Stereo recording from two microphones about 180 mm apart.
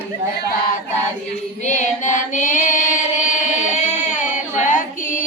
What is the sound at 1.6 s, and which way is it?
Music, 40° left (ahead or behind).